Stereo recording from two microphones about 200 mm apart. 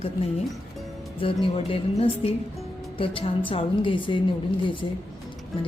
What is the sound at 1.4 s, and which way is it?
A woman's voice, 30° left (ahead or behind).